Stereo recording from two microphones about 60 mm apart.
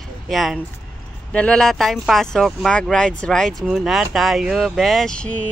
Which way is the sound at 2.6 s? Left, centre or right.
Centre.